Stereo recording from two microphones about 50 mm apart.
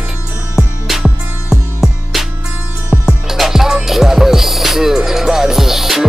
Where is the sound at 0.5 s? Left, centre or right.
Centre.